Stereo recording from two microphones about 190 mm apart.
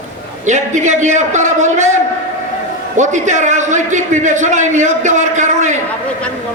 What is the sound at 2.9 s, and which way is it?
A man's voice, 40° right (ahead or behind).